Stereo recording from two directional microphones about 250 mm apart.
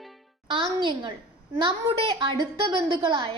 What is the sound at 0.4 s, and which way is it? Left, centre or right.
Music, centre.